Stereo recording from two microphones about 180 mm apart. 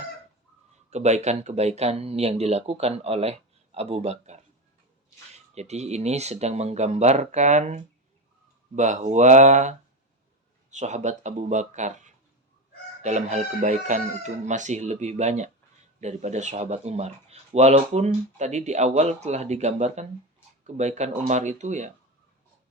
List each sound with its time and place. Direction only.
0.9 s speech: 40° right (ahead or behind)
5.5 s speech: 40° right (ahead or behind)